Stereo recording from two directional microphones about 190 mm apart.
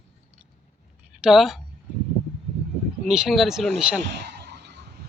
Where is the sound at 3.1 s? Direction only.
Centre (ahead or behind).